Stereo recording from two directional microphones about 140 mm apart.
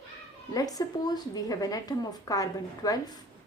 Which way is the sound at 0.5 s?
25° left (ahead or behind).